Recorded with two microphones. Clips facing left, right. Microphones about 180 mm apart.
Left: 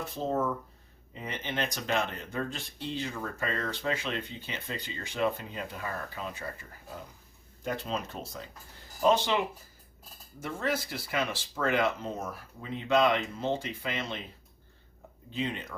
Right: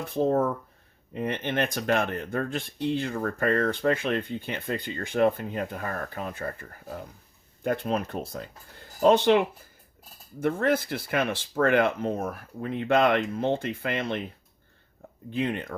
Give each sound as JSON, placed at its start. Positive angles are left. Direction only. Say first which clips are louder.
{"t": 0.1, "sound": "speech", "louder": "right 7 dB", "side_deg": -55}
{"t": 10.4, "sound": "speech", "louder": "right 8 dB", "side_deg": -55}
{"t": 15.3, "sound": "speech", "louder": "right 6 dB", "side_deg": -55}